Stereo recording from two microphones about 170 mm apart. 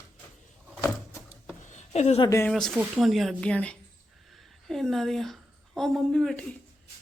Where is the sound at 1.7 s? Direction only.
40° left (ahead or behind).